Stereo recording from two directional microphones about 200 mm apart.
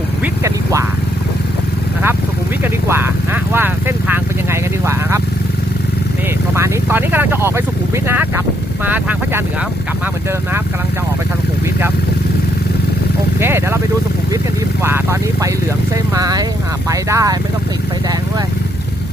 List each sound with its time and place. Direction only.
0.4 s vehicle: 15° right (ahead or behind)
2.9 s vehicle: 10° right (ahead or behind)
6.5 s vehicle: 10° right (ahead or behind)
8.8 s speech: 10° right (ahead or behind)
13.4 s speech: 10° right (ahead or behind)
14.8 s speech: 10° right (ahead or behind)